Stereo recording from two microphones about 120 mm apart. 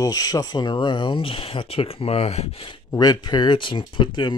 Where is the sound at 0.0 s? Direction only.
30° left (ahead or behind); by 2.8 s 50° left (ahead or behind).